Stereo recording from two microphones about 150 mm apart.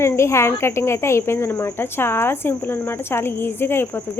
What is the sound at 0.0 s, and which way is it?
Speech, 20° left (ahead or behind).